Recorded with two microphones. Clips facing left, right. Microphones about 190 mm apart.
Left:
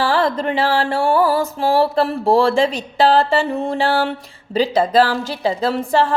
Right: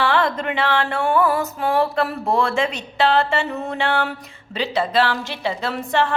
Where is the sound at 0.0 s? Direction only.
35° left (ahead or behind).